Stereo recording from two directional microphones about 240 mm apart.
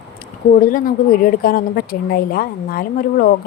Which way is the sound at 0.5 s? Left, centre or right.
Left.